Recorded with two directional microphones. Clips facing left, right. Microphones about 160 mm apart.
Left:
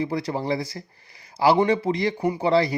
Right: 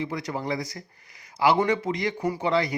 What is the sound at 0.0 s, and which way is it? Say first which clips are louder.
Speech: left 4 dB; 30° left (ahead or behind).